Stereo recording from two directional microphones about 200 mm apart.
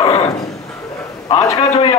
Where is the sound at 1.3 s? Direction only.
20° left (ahead or behind).